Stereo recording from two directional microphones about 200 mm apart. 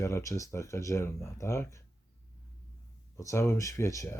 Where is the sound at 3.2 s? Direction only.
15° left (ahead or behind).